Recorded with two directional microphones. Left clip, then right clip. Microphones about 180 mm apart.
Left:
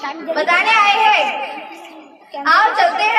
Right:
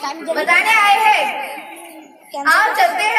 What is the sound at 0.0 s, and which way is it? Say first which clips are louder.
Chatter: right 1 dB; 30° right (ahead or behind).